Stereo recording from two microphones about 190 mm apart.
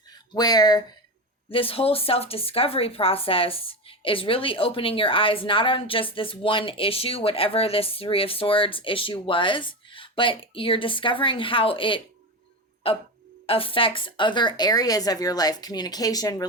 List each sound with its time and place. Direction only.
0.3 s speech: 20° left (ahead or behind)